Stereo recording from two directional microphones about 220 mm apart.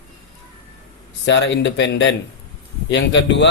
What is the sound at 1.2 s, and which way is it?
A man's voice, 55° left (ahead or behind).